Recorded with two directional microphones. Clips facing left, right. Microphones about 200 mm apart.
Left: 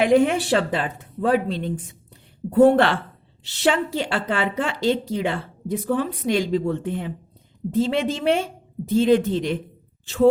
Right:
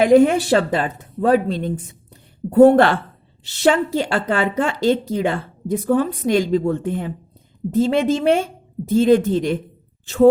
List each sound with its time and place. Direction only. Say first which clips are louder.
0.0 s a woman's voice: right 5 dB; 40° right (ahead or behind)